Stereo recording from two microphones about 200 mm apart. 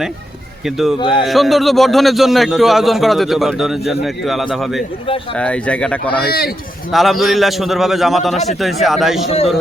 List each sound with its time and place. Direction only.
0.6 s a man's voice: centre (ahead or behind)
0.9 s speech: 25° left (ahead or behind)
1.3 s a man's voice: centre (ahead or behind)
6.2 s speech: 50° left (ahead or behind)
6.9 s a man's voice: centre (ahead or behind)